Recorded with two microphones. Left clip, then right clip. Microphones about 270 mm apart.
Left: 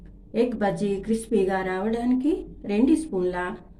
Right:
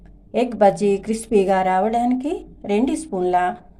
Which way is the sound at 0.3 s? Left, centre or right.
Right.